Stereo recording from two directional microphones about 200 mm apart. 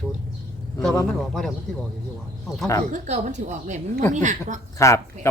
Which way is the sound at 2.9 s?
35° right (ahead or behind).